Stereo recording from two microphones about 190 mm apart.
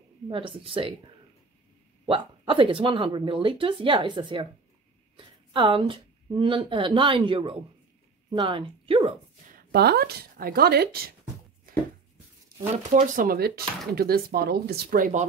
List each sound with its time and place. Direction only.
0.3 s speech: 25° right (ahead or behind)
2.0 s a woman's voice: 25° right (ahead or behind)
9.5 s speech: 55° right (ahead or behind)
12.9 s speech: 45° right (ahead or behind)